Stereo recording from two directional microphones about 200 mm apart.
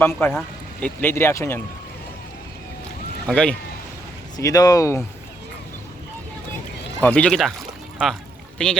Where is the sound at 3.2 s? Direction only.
5° left (ahead or behind).